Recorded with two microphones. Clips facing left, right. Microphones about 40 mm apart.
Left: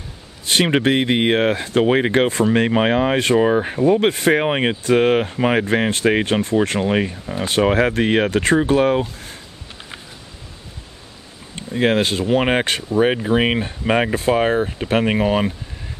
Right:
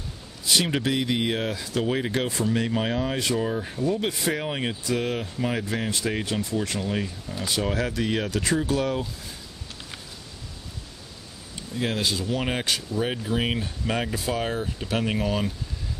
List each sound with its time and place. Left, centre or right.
0.5 s speech: left
11.5 s speech: left